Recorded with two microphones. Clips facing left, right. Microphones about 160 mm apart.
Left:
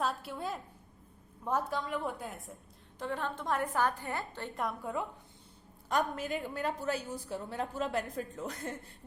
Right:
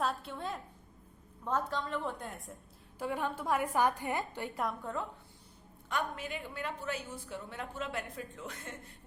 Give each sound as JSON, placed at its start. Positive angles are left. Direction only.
{"t": 0.0, "sound": "a sound", "side_deg": 5}
{"t": 1.5, "sound": "a woman's voice", "side_deg": 10}
{"t": 3.0, "sound": "a woman's voice", "side_deg": -10}
{"t": 4.5, "sound": "a woman's voice", "side_deg": 0}
{"t": 5.9, "sound": "a woman's voice", "side_deg": 40}